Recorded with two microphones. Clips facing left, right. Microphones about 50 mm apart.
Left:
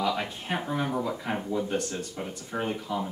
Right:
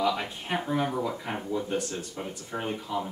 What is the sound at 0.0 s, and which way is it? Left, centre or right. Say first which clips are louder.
Speech: right 1 dB; centre.